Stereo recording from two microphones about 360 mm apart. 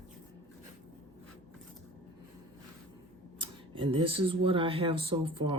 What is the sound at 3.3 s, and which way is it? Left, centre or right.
Speech, centre.